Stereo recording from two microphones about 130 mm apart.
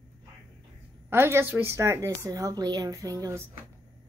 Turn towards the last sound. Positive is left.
turn(degrees=-25)  # may be behind; listen again after turning